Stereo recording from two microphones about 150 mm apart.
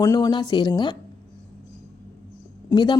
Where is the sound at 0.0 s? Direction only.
25° left (ahead or behind).